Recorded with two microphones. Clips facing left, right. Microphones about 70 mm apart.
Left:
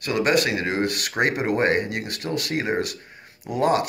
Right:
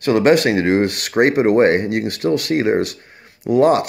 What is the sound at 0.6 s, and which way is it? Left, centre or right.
Speech, right.